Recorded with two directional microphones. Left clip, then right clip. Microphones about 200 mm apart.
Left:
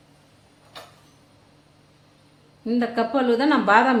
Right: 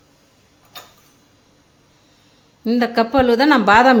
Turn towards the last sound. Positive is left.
turn(degrees=-50)  # may be behind; listen again after turning